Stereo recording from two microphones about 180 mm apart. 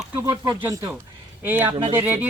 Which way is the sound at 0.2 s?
15° right (ahead or behind).